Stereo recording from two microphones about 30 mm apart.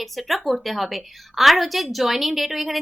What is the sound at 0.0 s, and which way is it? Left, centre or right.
Speech, centre.